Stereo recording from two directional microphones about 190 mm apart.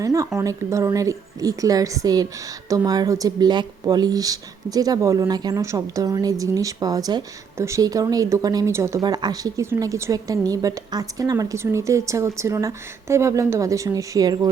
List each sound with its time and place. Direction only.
0.0 s a woman's voice: 15° right (ahead or behind)